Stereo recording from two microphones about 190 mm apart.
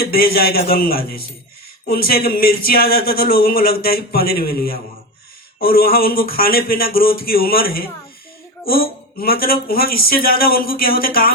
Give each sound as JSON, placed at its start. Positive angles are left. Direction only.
{"t": 0.0, "sound": "speech", "side_deg": 50}